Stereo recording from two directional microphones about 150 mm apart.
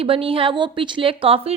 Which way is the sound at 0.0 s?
40° right (ahead or behind).